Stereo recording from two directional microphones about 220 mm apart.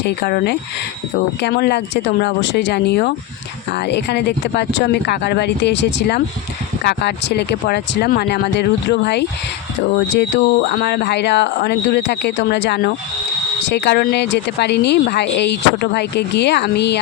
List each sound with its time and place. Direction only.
0.0 s a woman's voice: 50° left (ahead or behind)